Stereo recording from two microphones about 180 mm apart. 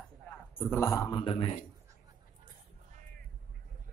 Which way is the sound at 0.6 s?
10° left (ahead or behind).